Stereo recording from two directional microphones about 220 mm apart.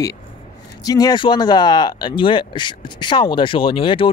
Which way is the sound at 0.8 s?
15° left (ahead or behind).